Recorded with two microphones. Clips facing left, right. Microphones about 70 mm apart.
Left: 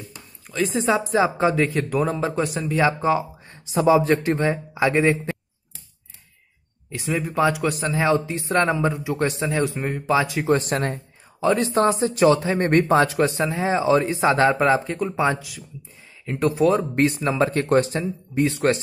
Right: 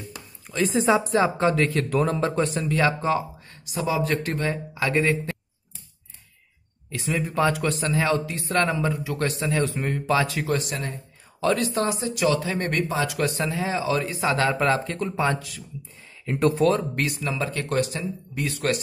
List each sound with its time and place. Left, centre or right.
0.5 s a woman's voice: centre
1.4 s speech: centre
3.7 s speech: left
7.0 s speech: centre
10.5 s speech: left
11.3 s a woman's voice: left
11.8 s speech: left
12.8 s speech: left
13.2 s speech: left
16.3 s a woman's voice: centre
16.6 s speech: left